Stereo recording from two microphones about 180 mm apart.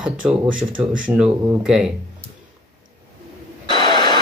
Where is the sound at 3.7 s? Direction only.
25° left (ahead or behind).